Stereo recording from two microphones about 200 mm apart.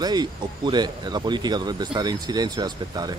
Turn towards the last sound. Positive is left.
turn(degrees=-20)  # may be behind; listen again after turning